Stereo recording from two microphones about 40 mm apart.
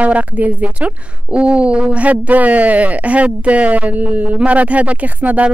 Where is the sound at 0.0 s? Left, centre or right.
Right.